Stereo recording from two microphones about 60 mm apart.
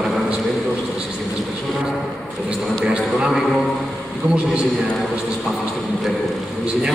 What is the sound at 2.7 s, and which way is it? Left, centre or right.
Speech, centre.